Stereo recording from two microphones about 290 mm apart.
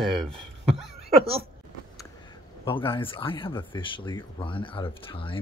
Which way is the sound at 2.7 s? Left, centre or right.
Centre.